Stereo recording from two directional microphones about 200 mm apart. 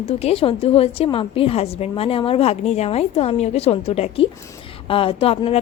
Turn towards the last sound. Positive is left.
turn(degrees=30)  # may be behind; listen again after turning